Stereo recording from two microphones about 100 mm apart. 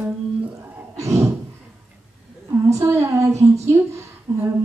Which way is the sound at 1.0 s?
30° right (ahead or behind).